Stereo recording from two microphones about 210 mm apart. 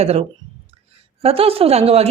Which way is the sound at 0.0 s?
30° right (ahead or behind).